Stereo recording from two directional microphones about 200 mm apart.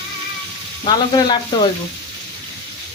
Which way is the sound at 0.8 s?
20° left (ahead or behind).